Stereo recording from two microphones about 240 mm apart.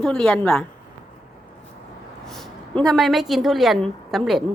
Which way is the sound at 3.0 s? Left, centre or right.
Centre.